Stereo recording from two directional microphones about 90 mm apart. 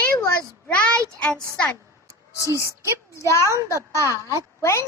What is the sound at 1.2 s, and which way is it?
Speech, 10° left (ahead or behind).